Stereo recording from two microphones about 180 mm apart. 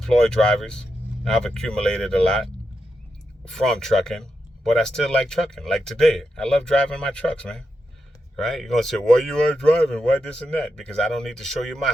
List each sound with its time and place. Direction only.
0.0 s speech: 5° left (ahead or behind)